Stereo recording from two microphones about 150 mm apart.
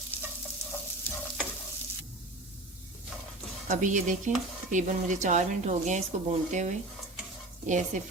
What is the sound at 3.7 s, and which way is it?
A woman's voice, 60° right (ahead or behind).